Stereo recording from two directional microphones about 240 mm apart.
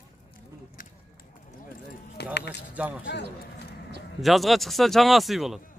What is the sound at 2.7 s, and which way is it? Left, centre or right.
Speech, centre.